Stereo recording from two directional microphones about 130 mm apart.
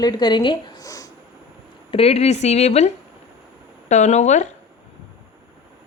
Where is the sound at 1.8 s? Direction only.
50° left (ahead or behind).